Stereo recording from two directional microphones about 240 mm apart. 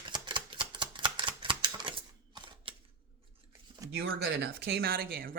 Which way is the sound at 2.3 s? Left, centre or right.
Centre.